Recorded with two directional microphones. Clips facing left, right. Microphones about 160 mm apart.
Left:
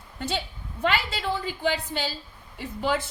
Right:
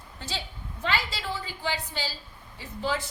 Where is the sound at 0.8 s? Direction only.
55° left (ahead or behind).